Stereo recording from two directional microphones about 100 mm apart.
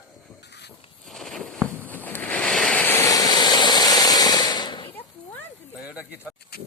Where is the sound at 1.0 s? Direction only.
5° left (ahead or behind).